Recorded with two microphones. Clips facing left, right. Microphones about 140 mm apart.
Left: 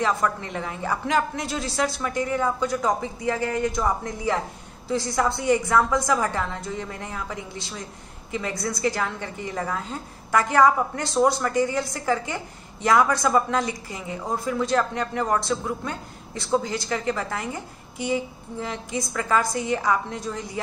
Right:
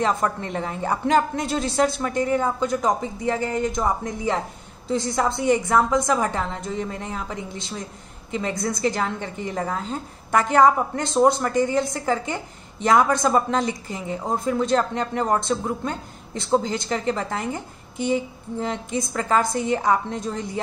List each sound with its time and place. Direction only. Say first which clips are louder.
0.0 s a woman's voice: right 1 dB; 25° right (ahead or behind)
18.6 s a woman's voice: right 3 dB; 25° right (ahead or behind)